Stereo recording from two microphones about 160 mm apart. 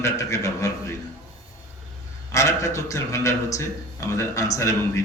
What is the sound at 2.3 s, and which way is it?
A man's voice, 20° left (ahead or behind).